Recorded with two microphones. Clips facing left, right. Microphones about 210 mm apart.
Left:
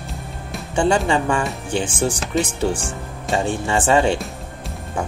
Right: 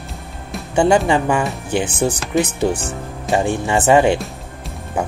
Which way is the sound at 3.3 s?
20° right (ahead or behind).